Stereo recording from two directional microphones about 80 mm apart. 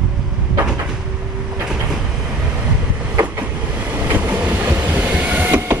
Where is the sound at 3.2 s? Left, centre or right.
Right.